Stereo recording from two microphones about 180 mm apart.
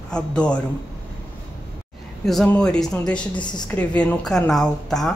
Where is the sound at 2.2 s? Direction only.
5° left (ahead or behind).